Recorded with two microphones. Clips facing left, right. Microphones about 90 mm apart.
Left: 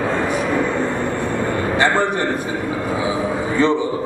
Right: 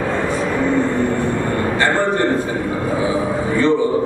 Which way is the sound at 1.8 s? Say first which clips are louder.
Even; 15° left (ahead or behind).